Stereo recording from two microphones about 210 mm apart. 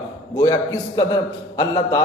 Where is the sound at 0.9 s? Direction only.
20° left (ahead or behind).